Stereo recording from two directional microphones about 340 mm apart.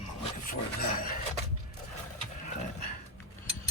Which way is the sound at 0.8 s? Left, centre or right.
Left.